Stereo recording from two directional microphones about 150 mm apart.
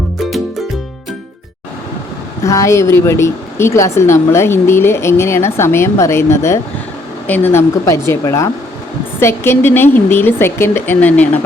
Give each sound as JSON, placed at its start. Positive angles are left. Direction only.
{"t": 2.4, "sound": "a woman's voice", "side_deg": 20}